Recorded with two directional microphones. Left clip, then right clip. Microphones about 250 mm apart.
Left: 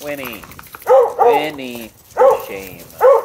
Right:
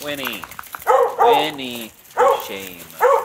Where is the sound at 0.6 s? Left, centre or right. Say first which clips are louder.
Left 4 dB; right.